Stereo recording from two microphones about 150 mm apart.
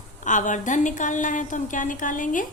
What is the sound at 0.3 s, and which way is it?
A woman's voice, 55° left (ahead or behind).